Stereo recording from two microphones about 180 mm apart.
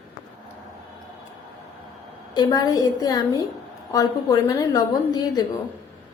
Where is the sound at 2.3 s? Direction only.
20° left (ahead or behind).